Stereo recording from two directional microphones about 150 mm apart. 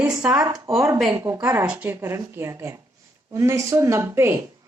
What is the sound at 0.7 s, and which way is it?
Speech, 20° right (ahead or behind).